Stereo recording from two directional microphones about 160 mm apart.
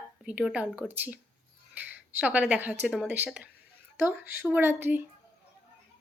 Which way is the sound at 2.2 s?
10° right (ahead or behind).